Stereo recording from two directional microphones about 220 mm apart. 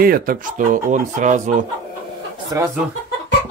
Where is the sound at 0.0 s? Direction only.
40° right (ahead or behind).